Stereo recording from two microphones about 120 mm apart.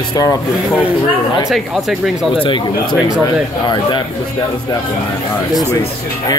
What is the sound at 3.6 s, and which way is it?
Speech, 40° left (ahead or behind).